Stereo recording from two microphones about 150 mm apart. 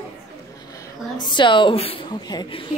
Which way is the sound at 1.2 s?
30° left (ahead or behind).